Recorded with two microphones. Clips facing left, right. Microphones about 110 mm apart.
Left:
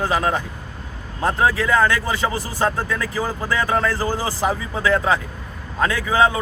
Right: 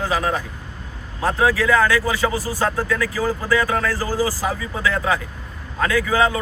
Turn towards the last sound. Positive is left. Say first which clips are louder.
# even
turn(degrees=25)  # may be behind; listen again after turning